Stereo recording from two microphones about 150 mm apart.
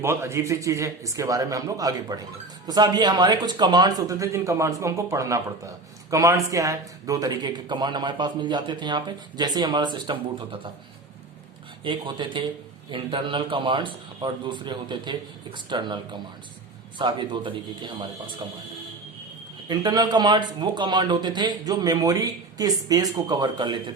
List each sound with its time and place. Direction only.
0.0 s speech: 15° right (ahead or behind); by 10.7 s 35° right (ahead or behind)
11.8 s a man's voice: 35° right (ahead or behind)
17.0 s a man's voice: 30° right (ahead or behind)
19.6 s speech: 25° right (ahead or behind)